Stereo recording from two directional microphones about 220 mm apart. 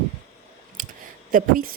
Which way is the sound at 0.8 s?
40° right (ahead or behind).